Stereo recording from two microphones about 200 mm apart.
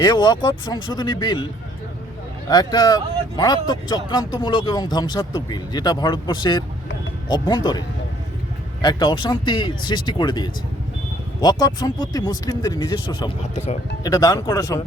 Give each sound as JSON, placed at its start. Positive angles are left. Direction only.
{"t": 0.0, "sound": "speech", "side_deg": 20}
{"t": 2.5, "sound": "speech", "side_deg": 20}
{"t": 14.0, "sound": "speech", "side_deg": 20}